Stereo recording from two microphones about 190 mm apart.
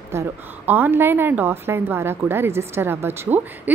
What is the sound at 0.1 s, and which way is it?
A woman's voice, 10° right (ahead or behind).